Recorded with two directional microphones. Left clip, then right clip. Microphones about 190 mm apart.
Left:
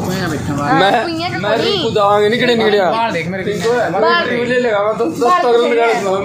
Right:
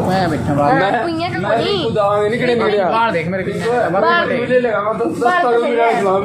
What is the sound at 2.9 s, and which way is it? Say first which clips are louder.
Speech: right 1 dB; 5° right (ahead or behind).